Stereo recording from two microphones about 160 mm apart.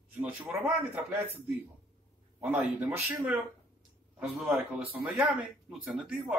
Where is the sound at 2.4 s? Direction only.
10° right (ahead or behind).